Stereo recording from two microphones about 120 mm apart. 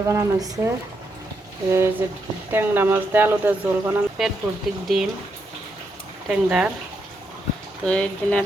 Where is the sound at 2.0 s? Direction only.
20° right (ahead or behind).